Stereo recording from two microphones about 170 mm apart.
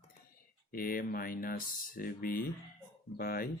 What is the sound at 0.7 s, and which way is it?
Speech, 60° left (ahead or behind).